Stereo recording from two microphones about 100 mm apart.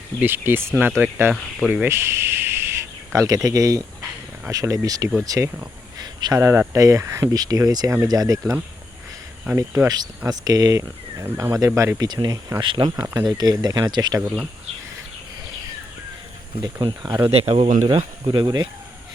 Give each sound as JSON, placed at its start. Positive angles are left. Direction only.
{"t": 0.2, "sound": "speech", "side_deg": -20}
{"t": 1.3, "sound": "speech", "side_deg": 0}
{"t": 1.9, "sound": "speech", "side_deg": -25}
{"t": 6.0, "sound": "a sound", "side_deg": -45}
{"t": 6.3, "sound": "speech", "side_deg": -30}
{"t": 9.6, "sound": "speech", "side_deg": -35}
{"t": 12.0, "sound": "speech", "side_deg": -45}
{"t": 12.5, "sound": "speech", "side_deg": -55}
{"t": 13.0, "sound": "speech", "side_deg": -35}
{"t": 14.2, "sound": "speech", "side_deg": -20}
{"t": 16.8, "sound": "speech", "side_deg": -50}
{"t": 17.3, "sound": "speech", "side_deg": -85}
{"t": 17.8, "sound": "speech", "side_deg": -50}